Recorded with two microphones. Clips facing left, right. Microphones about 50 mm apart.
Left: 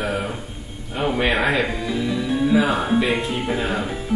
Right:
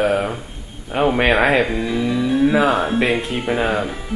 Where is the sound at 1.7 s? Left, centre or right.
Centre.